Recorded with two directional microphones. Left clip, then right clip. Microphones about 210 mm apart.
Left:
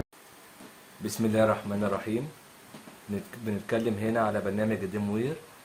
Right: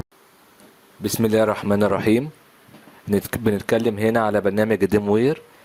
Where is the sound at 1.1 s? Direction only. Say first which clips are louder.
Right 7 dB; 50° right (ahead or behind).